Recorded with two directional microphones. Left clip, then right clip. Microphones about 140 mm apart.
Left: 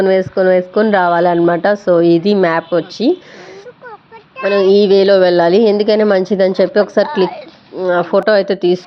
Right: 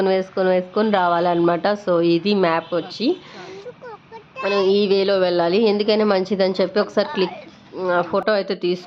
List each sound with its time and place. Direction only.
0.0 s a woman's voice: 30° left (ahead or behind)
4.4 s a woman's voice: 40° left (ahead or behind)